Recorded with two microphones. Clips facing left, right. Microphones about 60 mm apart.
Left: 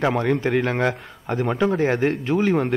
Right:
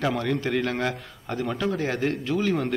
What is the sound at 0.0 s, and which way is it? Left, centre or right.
A man's voice, left.